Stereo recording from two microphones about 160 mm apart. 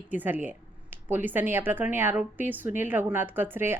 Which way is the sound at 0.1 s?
10° right (ahead or behind).